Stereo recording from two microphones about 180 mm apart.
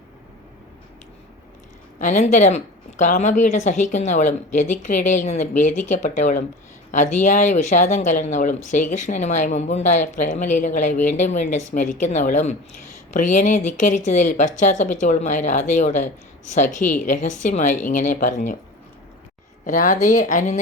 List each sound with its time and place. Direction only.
2.0 s a woman's voice: 45° left (ahead or behind)
19.6 s a woman's voice: 45° left (ahead or behind)